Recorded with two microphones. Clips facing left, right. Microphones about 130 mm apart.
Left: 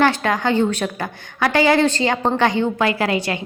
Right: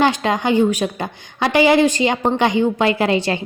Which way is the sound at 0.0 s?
20° right (ahead or behind).